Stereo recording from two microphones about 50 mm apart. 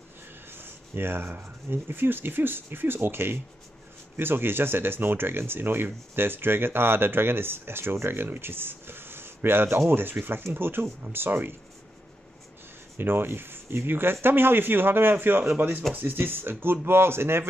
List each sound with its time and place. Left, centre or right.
0.5 s speech: right
12.9 s speech: right